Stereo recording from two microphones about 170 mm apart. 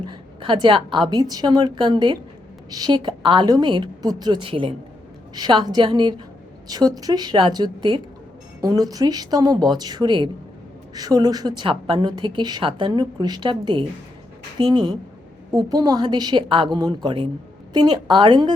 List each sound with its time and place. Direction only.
0.0 s a woman's voice: 25° right (ahead or behind)